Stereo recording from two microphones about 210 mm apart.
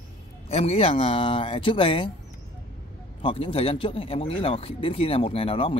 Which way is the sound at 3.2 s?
25° left (ahead or behind).